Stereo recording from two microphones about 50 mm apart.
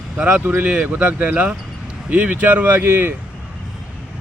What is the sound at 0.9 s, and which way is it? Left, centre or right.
Speech, right.